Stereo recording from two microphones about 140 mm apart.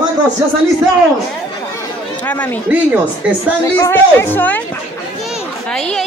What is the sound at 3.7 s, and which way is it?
Speech, 20° left (ahead or behind).